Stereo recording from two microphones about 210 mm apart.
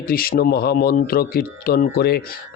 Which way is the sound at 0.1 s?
45° left (ahead or behind).